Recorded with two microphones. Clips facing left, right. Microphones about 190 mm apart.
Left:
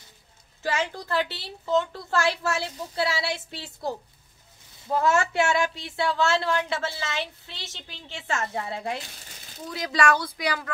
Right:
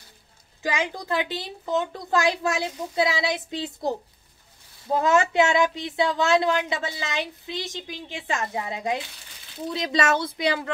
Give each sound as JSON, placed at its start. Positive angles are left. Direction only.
{"t": 0.6, "sound": "speech", "side_deg": -15}